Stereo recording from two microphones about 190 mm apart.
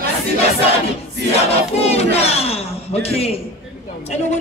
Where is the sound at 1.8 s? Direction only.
35° left (ahead or behind).